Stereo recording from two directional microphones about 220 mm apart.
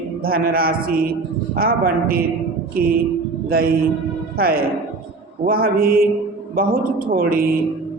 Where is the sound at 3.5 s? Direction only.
40° right (ahead or behind).